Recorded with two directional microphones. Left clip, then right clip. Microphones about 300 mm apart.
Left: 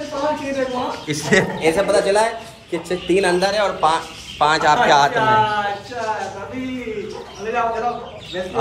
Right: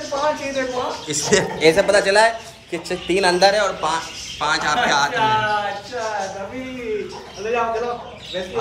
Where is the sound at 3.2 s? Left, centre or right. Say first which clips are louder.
Right 3 dB; right.